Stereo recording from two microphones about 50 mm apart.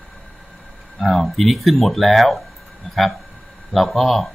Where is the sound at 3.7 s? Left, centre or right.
Centre.